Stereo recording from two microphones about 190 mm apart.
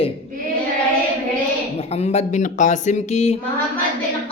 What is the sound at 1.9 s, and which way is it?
Speech, 35° left (ahead or behind).